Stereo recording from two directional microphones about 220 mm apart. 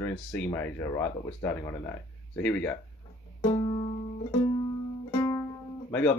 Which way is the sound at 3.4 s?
25° left (ahead or behind).